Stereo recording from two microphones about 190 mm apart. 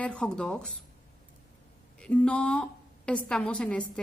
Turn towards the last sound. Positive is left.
turn(degrees=5)  # may be behind; listen again after turning